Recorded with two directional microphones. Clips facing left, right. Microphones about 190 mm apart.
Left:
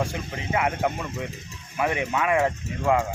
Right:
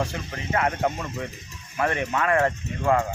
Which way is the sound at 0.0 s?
15° left (ahead or behind).